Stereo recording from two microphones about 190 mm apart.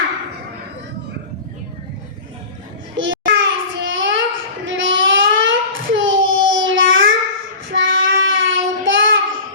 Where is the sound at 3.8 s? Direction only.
85° right.